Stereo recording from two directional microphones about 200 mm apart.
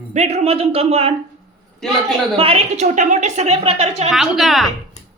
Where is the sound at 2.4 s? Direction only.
30° right (ahead or behind).